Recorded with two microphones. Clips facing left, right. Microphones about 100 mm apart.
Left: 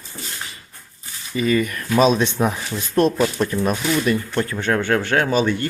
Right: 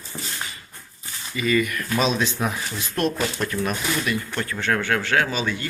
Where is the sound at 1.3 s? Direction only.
35° left (ahead or behind).